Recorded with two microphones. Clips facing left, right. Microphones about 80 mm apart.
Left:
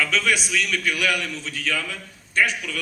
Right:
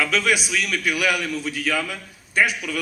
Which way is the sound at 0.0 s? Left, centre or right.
Centre.